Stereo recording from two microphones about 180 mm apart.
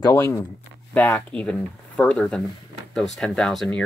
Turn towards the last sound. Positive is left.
turn(degrees=5)  # may be behind; listen again after turning